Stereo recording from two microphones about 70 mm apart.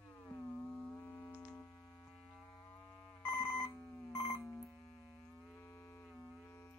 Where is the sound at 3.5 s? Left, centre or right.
Centre.